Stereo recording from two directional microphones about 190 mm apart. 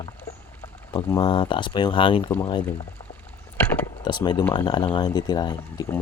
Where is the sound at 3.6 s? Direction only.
10° left (ahead or behind).